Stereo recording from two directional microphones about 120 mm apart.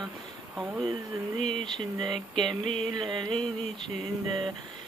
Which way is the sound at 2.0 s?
5° left (ahead or behind).